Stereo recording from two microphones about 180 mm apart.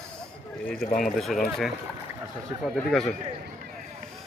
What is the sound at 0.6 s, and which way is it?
A man's voice, centre (ahead or behind).